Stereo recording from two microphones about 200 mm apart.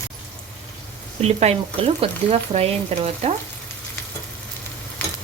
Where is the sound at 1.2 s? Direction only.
30° right (ahead or behind).